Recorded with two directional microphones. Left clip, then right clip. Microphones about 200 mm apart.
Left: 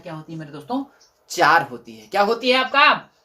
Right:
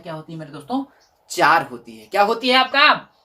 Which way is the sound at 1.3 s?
15° left (ahead or behind).